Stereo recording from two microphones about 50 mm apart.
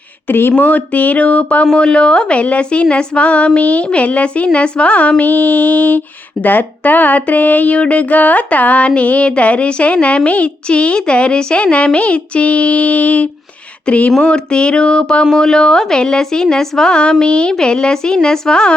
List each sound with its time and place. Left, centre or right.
0.3 s a woman's voice: left
14.2 s a woman's voice: centre